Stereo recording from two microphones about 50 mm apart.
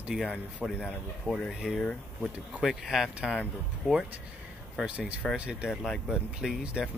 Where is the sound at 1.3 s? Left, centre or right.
Right.